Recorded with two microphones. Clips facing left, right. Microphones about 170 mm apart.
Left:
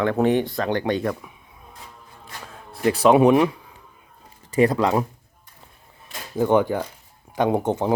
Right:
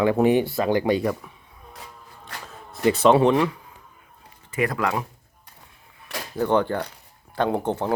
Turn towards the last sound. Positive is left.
turn(degrees=20)  # may be behind; listen again after turning